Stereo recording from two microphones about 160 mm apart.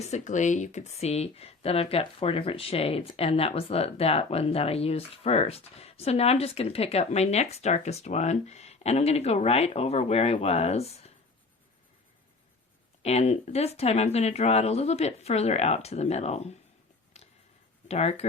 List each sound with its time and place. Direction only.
0.0 s speech: 45° left (ahead or behind)
13.0 s speech: 40° left (ahead or behind)
17.2 s a sound: 40° left (ahead or behind)
17.8 s speech: 40° left (ahead or behind)